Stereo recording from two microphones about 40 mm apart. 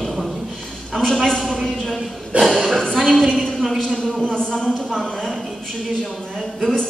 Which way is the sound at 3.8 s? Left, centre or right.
Centre.